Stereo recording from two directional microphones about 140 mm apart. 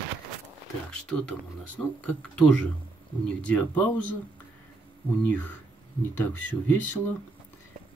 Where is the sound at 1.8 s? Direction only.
15° left (ahead or behind).